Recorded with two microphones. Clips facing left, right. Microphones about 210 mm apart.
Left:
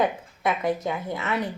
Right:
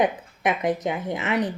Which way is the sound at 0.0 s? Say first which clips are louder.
Right 2 dB; 20° right (ahead or behind).